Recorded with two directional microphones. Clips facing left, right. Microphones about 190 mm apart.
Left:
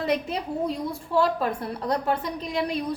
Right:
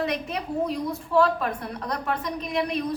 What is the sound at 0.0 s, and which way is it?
A woman's voice, 30° left (ahead or behind).